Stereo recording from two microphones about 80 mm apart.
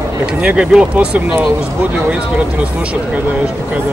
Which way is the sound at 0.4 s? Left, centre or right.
Centre.